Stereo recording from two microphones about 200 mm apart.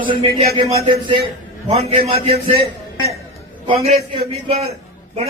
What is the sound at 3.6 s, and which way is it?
Speech, 30° right (ahead or behind).